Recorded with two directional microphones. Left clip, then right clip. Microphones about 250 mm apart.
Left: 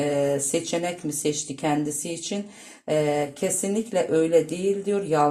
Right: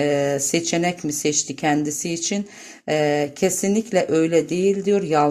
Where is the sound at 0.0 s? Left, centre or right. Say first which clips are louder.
Right 3 dB; right.